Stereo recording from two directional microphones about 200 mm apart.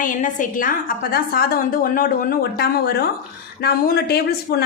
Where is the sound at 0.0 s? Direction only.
40° left (ahead or behind).